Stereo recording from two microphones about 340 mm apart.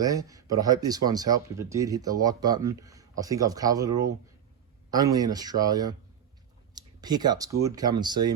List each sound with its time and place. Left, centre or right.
0.0 s speech: centre